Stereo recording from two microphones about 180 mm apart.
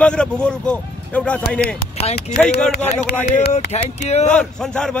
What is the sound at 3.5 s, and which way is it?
Speech, 35° left (ahead or behind).